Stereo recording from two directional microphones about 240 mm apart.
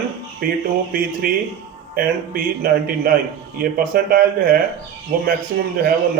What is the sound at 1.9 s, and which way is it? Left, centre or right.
Speech, right.